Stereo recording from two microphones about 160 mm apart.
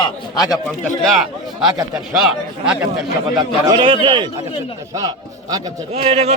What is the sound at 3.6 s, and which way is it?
Speech, 30° right (ahead or behind).